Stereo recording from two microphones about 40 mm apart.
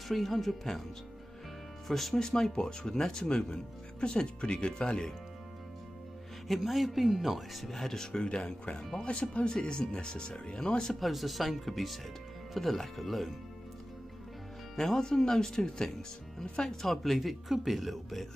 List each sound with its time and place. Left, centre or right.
0.1 s speech: centre
1.9 s speech: centre
2.1 s speech: centre
6.4 s speech: centre
9.0 s speech: left
11.0 s speech: centre
14.8 s speech: centre
16.6 s speech: centre